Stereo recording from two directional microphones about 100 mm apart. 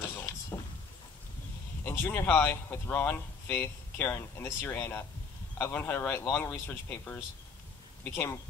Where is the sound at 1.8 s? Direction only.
20° left (ahead or behind).